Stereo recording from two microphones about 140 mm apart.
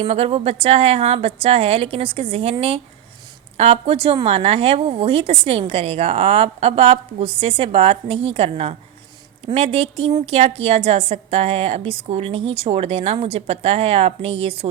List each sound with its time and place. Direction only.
0.0 s a woman's voice: 45° right (ahead or behind)